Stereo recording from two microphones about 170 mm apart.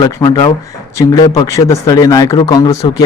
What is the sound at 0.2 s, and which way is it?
Speech, 20° left (ahead or behind).